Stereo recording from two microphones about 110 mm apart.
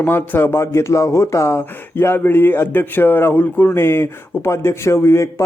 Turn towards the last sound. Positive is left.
turn(degrees=25)  # may be behind; listen again after turning